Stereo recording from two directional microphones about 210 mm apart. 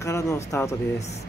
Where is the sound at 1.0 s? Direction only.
30° left (ahead or behind).